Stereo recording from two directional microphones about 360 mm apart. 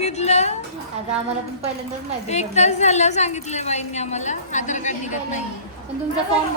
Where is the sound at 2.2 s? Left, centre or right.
Centre.